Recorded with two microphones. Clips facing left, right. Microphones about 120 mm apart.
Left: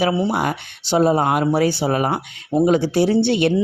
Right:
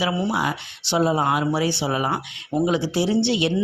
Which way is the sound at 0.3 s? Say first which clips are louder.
Left 3 dB; 50° left (ahead or behind).